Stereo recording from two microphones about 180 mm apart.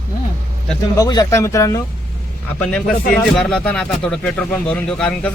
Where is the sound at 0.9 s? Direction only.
20° left (ahead or behind).